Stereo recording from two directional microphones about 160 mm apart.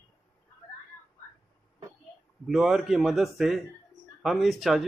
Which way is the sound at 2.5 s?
Centre (ahead or behind).